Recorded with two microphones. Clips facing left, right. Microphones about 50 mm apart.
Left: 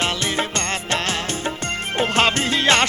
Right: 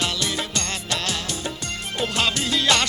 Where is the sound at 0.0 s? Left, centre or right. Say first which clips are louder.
Left 4 dB; left.